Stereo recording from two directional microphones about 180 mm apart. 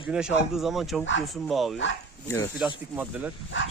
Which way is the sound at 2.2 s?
15° left (ahead or behind).